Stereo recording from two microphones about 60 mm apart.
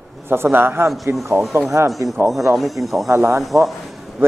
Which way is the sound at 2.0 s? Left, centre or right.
Right.